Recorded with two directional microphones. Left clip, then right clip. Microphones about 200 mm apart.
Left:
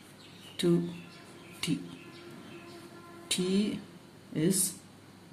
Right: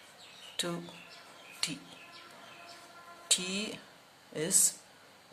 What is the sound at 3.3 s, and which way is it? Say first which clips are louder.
Speech: left 1 dB; 30° right (ahead or behind).